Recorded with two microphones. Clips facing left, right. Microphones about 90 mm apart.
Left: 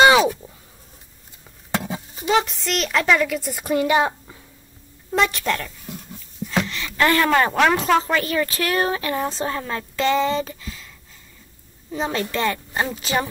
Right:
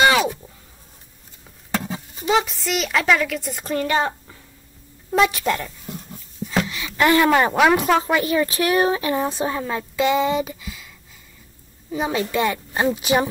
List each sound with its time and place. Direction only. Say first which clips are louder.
2.2 s a woman's voice: even; centre (ahead or behind)
3.6 s a woman's voice: left 3 dB; 10° left (ahead or behind)
5.1 s a woman's voice: right 2 dB; 5° right (ahead or behind)
6.4 s a sound: even; 5° right (ahead or behind)
7.0 s a woman's voice: right 2 dB; 15° right (ahead or behind)
11.9 s speech: right 2 dB; 10° right (ahead or behind)